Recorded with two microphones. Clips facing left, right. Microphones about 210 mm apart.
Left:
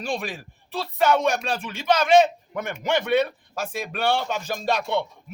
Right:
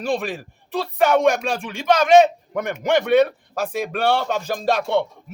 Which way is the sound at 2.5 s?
45° right (ahead or behind).